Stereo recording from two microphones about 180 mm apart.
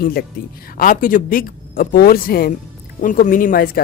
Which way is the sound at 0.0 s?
55° left (ahead or behind).